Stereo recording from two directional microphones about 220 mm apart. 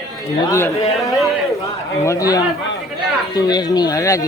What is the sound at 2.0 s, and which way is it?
A man's voice, 15° left (ahead or behind).